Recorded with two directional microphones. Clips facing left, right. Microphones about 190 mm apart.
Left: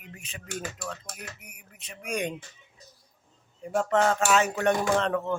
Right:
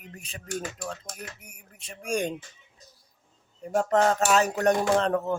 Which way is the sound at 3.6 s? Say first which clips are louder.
Right 1 dB; 40° right (ahead or behind).